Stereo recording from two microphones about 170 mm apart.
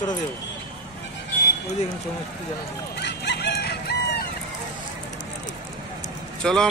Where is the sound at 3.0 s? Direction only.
80° left.